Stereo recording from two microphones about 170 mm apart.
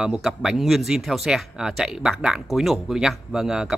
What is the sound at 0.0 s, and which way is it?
Speech, 5° right (ahead or behind).